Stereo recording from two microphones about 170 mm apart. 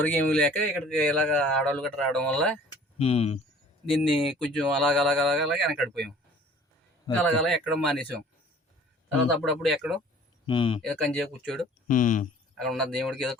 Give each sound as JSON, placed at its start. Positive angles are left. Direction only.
{"t": 0.0, "sound": "a man's voice", "side_deg": 10}
{"t": 3.0, "sound": "speech", "side_deg": 35}
{"t": 3.8, "sound": "speech", "side_deg": 0}
{"t": 7.1, "sound": "speech", "side_deg": 5}
{"t": 9.4, "sound": "speech", "side_deg": 0}
{"t": 10.4, "sound": "speech", "side_deg": 30}
{"t": 11.0, "sound": "speech", "side_deg": 5}
{"t": 11.9, "sound": "speech", "side_deg": 50}
{"t": 12.5, "sound": "speech", "side_deg": 0}